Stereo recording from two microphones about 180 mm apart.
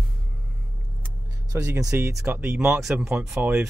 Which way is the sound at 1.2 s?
15° right (ahead or behind).